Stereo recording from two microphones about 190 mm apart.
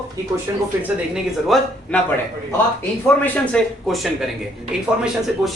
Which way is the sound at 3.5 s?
5° left (ahead or behind).